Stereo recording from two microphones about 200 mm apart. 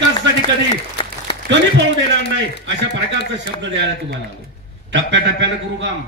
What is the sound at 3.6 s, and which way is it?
A man's voice, 60° right (ahead or behind).